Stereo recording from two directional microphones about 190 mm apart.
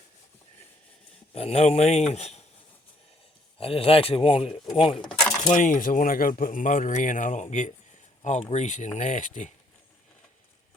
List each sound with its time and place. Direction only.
1.3 s speech: 30° left (ahead or behind)
3.6 s speech: 30° left (ahead or behind)
5.4 s speech: 40° left (ahead or behind)